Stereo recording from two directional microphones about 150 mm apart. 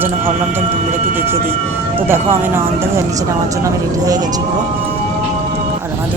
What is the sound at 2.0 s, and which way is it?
Speech, 15° right (ahead or behind).